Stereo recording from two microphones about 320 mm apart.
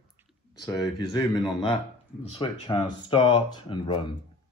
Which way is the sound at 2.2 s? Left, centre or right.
Centre.